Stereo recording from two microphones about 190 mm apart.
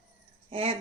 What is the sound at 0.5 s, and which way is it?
Speech, 30° right (ahead or behind).